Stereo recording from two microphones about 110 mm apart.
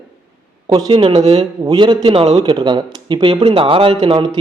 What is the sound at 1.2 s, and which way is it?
Speech, 70° right (ahead or behind).